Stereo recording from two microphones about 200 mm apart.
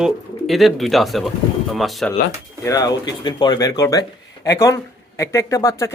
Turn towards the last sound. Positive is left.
turn(degrees=15)  # may be behind; listen again after turning